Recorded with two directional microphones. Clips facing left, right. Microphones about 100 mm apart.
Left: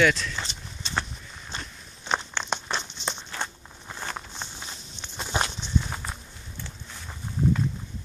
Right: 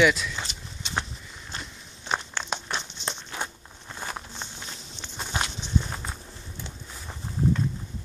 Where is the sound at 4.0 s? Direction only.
5° right (ahead or behind).